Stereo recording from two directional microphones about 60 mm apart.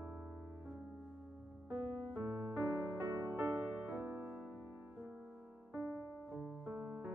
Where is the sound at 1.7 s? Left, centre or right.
Right.